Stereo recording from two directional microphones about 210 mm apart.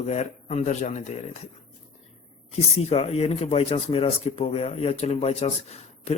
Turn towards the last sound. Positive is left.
turn(degrees=30)  # may be behind; listen again after turning